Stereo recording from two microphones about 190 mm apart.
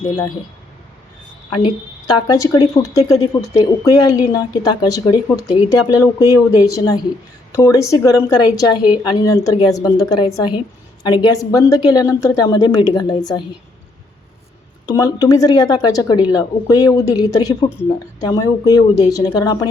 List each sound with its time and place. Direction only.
1.6 s speech: 20° left (ahead or behind)
14.9 s speech: 20° left (ahead or behind)